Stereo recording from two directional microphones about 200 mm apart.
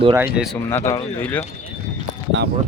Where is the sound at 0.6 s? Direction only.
15° left (ahead or behind).